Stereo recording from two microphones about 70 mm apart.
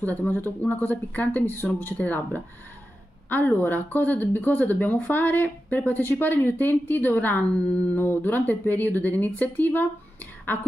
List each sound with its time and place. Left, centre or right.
0.0 s speech: left